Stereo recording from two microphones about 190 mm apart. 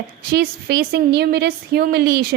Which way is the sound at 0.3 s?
60° right (ahead or behind).